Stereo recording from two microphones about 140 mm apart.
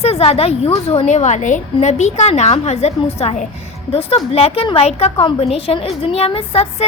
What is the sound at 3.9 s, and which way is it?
A woman's voice, 45° left (ahead or behind).